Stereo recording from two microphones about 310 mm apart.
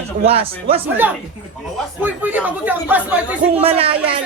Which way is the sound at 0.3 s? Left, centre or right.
Centre.